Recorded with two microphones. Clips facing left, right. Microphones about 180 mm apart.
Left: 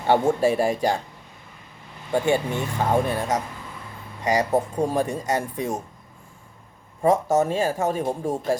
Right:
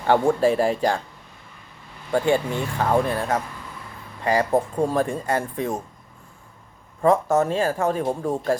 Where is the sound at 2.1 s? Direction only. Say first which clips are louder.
Right 1 dB; 15° left (ahead or behind).